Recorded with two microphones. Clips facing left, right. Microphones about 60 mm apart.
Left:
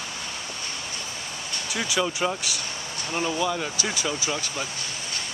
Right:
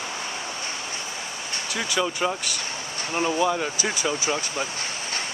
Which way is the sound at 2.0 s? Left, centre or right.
Centre.